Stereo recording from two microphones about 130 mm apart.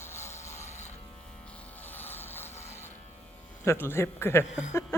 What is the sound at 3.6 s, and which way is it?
Speech, 20° left (ahead or behind).